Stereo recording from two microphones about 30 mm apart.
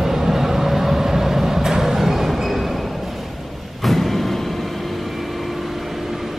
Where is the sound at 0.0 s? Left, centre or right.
Centre.